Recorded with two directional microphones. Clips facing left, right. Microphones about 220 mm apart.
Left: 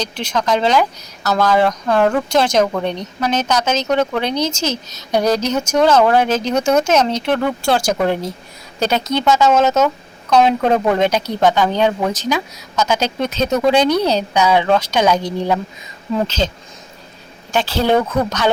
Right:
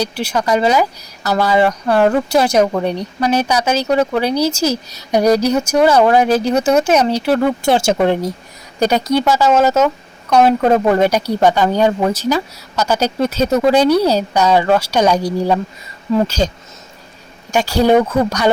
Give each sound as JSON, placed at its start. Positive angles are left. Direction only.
{"t": 0.0, "sound": "speech", "side_deg": -10}
{"t": 7.6, "sound": "speech", "side_deg": -25}
{"t": 17.5, "sound": "speech", "side_deg": -10}